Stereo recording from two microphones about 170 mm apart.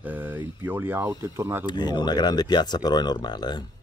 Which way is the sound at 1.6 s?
25° left (ahead or behind).